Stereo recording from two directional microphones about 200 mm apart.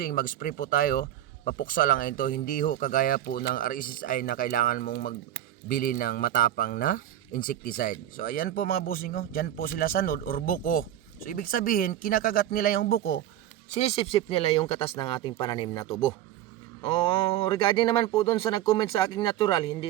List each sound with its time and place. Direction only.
0.0 s speech: 45° left (ahead or behind)
13.7 s speech: 35° left (ahead or behind)